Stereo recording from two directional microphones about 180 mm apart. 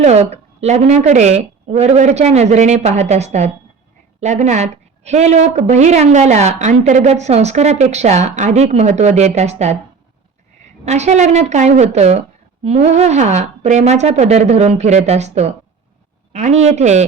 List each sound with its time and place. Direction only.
0.0 s a woman's voice: 35° right (ahead or behind)
10.8 s a woman's voice: 40° right (ahead or behind)